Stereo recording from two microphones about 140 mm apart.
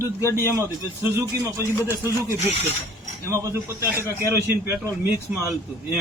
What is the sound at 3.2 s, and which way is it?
A man's voice, 20° right (ahead or behind).